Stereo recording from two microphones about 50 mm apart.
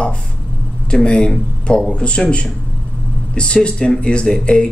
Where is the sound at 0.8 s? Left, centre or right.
Centre.